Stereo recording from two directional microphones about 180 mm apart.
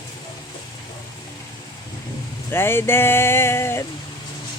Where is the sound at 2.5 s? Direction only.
15° left (ahead or behind).